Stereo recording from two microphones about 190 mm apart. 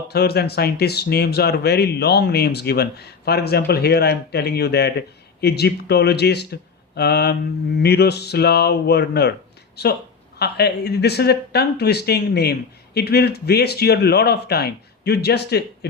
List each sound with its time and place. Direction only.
0.1 s speech: 55° left (ahead or behind)